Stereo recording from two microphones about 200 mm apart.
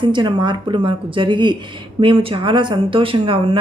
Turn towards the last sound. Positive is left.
turn(degrees=-25)  # may be behind; listen again after turning